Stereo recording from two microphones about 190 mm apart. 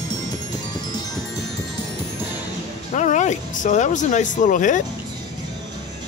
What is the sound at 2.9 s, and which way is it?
Speech, 40° left (ahead or behind).